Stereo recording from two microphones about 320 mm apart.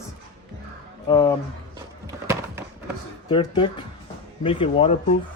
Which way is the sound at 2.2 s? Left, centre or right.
Centre.